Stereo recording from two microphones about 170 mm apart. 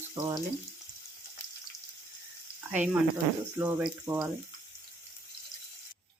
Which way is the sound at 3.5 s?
10° right (ahead or behind).